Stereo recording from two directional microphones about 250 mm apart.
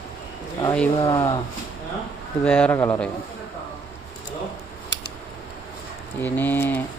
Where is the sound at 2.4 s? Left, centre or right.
Centre.